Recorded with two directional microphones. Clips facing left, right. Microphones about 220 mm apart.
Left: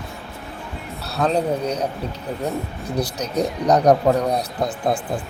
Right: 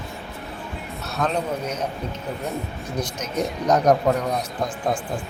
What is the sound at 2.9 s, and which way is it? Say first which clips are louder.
Speech: left 4 dB; 35° left (ahead or behind).